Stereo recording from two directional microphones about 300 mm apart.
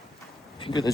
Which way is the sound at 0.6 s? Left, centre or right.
Centre.